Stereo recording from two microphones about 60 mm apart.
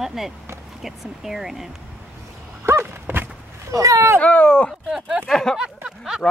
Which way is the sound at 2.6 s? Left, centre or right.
Right.